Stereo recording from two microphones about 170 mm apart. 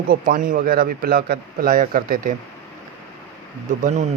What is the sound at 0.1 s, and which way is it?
A man's voice, 55° right (ahead or behind).